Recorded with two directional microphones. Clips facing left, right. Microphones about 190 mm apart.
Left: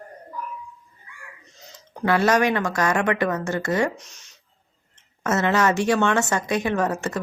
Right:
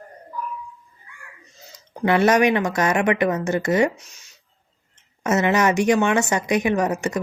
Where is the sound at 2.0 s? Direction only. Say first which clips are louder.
Right 3 dB; 20° right (ahead or behind).